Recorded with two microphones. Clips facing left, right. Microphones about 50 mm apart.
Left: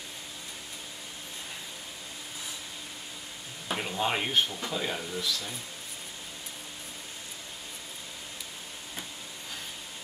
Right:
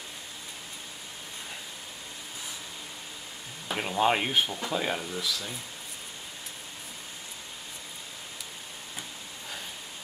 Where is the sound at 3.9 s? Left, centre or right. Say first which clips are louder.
Right 4 dB; centre.